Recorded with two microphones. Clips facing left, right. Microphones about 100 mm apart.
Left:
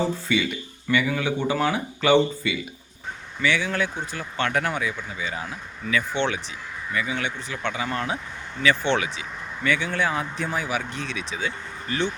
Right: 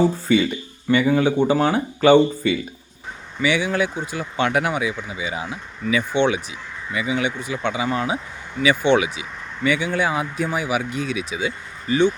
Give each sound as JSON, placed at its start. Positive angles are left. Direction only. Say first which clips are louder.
{"t": 0.3, "sound": "speech", "louder": "right 6 dB", "side_deg": -40}
{"t": 2.1, "sound": "speech", "louder": "right 5 dB", "side_deg": -45}
{"t": 3.4, "sound": "speech", "louder": "right 4 dB", "side_deg": -15}